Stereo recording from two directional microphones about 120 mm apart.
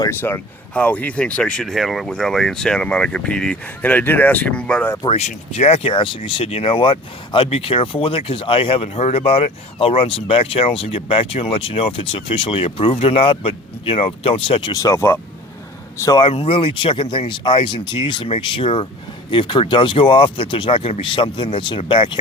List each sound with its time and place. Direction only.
0.1 s speech: 20° left (ahead or behind)
5.0 s speech: 60° left (ahead or behind)
14.7 s speech: 30° left (ahead or behind)
16.3 s speech: 50° left (ahead or behind)